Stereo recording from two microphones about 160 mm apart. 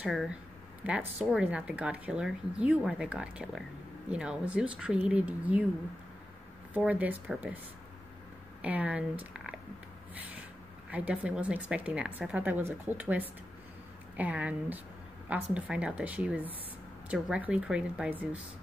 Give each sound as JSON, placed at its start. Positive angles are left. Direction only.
{"t": 0.0, "sound": "speech", "side_deg": -5}
{"t": 6.7, "sound": "speech", "side_deg": -10}
{"t": 8.6, "sound": "speech", "side_deg": -10}
{"t": 10.9, "sound": "speech", "side_deg": -10}